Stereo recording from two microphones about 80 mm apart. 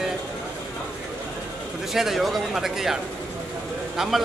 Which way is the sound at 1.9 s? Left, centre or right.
Centre.